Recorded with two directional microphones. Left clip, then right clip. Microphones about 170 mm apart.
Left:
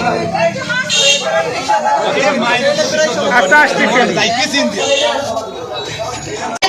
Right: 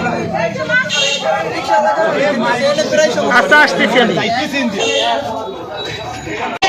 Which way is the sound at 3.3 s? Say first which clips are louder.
Left 1 dB; 25° right (ahead or behind).